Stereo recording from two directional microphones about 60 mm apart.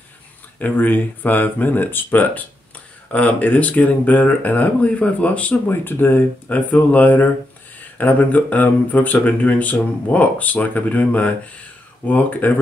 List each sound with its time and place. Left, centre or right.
0.6 s speech: left
5.7 s speech: left